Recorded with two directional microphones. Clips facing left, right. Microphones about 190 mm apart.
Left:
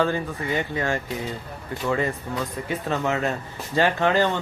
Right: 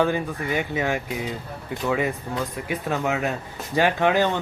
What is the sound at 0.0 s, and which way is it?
Speech, 15° right (ahead or behind).